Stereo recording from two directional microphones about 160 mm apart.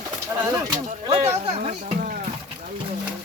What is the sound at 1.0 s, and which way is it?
Speech, 40° right (ahead or behind).